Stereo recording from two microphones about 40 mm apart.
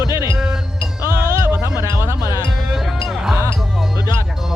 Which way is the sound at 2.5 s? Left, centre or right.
Centre.